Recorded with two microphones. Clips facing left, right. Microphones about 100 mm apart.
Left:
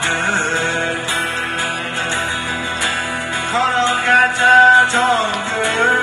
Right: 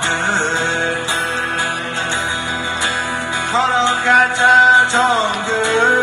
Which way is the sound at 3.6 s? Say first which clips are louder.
Right 1 dB; 20° right (ahead or behind).